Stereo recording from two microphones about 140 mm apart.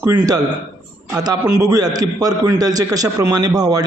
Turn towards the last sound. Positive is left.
turn(degrees=-25)  # may be behind; listen again after turning